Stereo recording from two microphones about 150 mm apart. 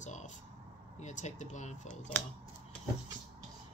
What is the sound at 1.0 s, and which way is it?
Speech, 55° left (ahead or behind).